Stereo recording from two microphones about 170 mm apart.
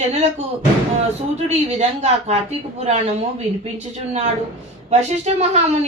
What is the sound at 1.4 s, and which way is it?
Speech, 40° right (ahead or behind).